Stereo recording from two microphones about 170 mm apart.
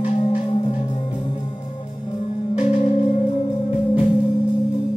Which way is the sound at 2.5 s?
40° left (ahead or behind).